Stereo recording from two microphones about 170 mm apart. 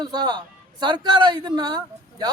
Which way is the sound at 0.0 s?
25° right (ahead or behind).